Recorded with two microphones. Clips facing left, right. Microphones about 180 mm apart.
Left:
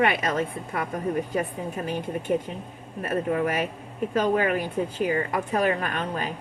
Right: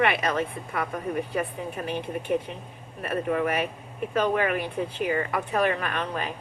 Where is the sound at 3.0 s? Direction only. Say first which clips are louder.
Left 1 dB; 35° left (ahead or behind).